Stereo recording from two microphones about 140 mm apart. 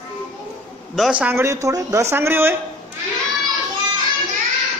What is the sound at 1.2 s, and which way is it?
A woman's voice, 20° right (ahead or behind).